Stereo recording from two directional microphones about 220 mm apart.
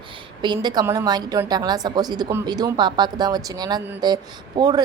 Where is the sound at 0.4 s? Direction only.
20° right (ahead or behind).